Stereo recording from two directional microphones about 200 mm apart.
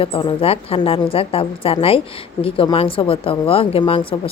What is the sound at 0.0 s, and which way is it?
Speech, 25° left (ahead or behind).